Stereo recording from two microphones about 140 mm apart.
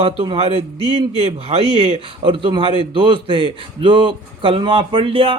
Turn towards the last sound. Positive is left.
turn(degrees=-40)  # may be behind; listen again after turning